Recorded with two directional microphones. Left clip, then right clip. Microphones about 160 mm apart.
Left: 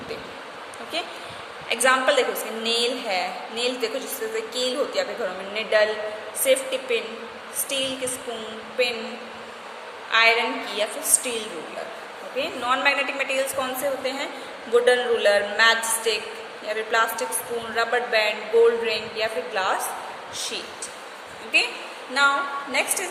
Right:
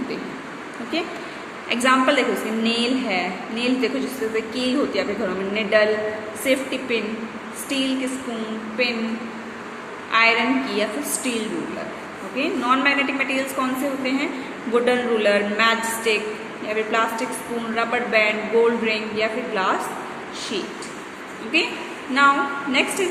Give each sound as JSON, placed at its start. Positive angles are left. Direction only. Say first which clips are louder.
{"t": 1.7, "sound": "a woman's voice", "louder": "right 1 dB", "side_deg": 15}
{"t": 10.1, "sound": "a woman's voice", "louder": "right 1 dB", "side_deg": 15}
{"t": 21.5, "sound": "a woman's voice", "louder": "even", "side_deg": 15}